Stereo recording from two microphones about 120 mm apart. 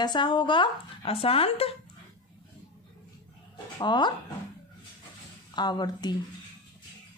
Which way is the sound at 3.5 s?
40° left (ahead or behind).